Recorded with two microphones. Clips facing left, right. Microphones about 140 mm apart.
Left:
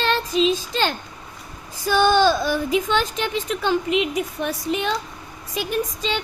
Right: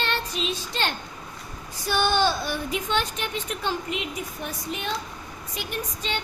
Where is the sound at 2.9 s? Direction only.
90° left.